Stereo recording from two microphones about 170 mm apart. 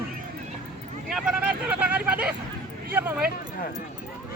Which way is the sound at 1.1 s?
5° right (ahead or behind).